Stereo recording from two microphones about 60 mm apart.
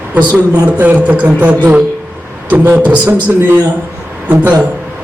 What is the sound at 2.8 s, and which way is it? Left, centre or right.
Speech, right.